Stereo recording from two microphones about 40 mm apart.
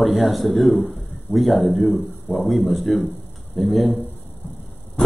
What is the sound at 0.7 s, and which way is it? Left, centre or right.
Speech, left.